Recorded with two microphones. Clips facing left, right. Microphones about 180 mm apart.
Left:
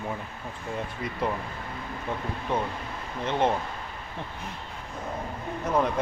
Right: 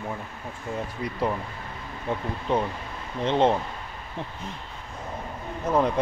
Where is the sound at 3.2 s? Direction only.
20° right (ahead or behind).